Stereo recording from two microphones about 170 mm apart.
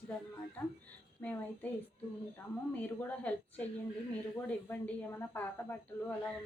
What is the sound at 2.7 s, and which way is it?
A woman's voice, 10° left (ahead or behind).